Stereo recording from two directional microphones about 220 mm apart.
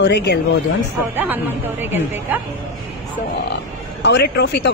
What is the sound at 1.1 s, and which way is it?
A woman's voice, 10° right (ahead or behind).